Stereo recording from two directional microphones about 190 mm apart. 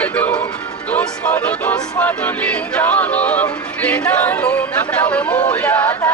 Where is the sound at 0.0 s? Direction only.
5° left (ahead or behind).